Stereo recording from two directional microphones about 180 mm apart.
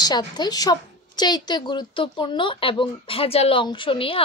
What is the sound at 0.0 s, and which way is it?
A woman's voice, 25° left (ahead or behind).